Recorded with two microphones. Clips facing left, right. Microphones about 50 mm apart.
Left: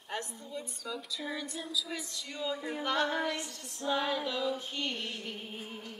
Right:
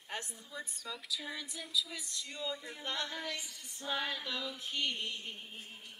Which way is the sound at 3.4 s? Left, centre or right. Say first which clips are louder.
Left 6 dB; centre.